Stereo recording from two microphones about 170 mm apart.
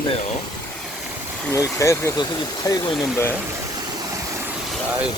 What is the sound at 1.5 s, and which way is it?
Speech, 20° left (ahead or behind).